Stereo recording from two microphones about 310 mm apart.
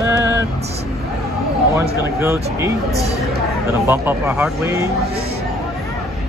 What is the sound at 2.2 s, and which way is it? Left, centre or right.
Speech, centre.